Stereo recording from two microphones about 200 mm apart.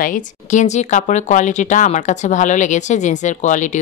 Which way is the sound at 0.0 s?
40° left (ahead or behind).